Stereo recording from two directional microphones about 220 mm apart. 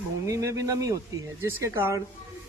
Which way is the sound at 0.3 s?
15° right (ahead or behind).